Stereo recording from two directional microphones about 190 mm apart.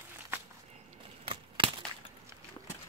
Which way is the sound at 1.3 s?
25° right (ahead or behind).